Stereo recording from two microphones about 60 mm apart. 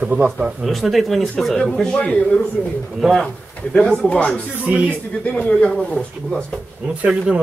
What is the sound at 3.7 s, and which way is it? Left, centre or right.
Speech, centre.